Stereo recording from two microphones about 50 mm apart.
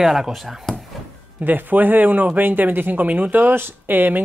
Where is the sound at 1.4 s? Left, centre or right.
Right.